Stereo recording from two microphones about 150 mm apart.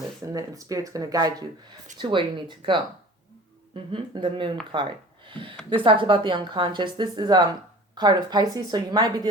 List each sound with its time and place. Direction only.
0.3 s a woman's voice: 20° right (ahead or behind)
3.9 s a woman's voice: 35° right (ahead or behind)